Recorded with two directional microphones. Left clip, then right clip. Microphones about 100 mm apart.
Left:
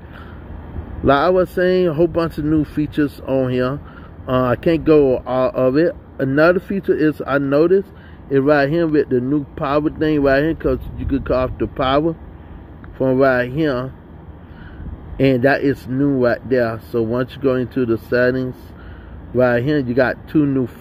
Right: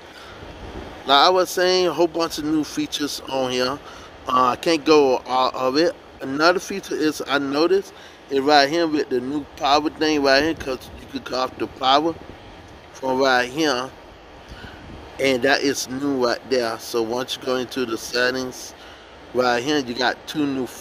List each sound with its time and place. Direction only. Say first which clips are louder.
1.0 s speech: left 1 dB; 25° right (ahead or behind)
15.1 s speech: left 3 dB; 30° right (ahead or behind)